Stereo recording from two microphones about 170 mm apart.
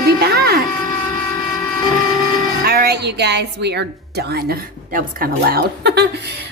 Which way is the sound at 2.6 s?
65° right (ahead or behind).